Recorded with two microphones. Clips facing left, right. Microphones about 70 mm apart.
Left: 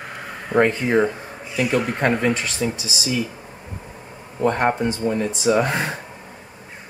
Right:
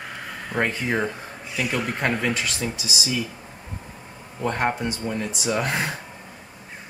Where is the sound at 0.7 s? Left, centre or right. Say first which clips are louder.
Left 6 dB; centre.